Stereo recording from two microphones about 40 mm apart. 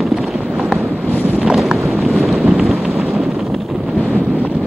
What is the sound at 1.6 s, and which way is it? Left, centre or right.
Boat, centre.